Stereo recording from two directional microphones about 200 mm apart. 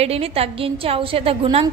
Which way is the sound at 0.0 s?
30° right (ahead or behind).